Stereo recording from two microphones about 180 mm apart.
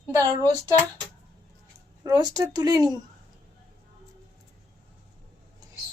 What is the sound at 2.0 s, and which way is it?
Speech, 20° right (ahead or behind).